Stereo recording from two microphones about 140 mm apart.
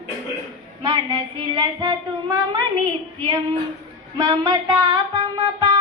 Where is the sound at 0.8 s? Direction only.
30° right (ahead or behind).